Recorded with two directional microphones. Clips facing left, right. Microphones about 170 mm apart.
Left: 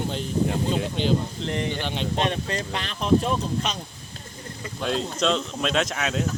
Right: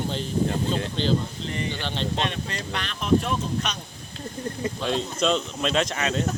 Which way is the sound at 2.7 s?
25° left (ahead or behind).